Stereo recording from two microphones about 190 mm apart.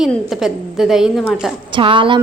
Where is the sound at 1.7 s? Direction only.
25° right (ahead or behind).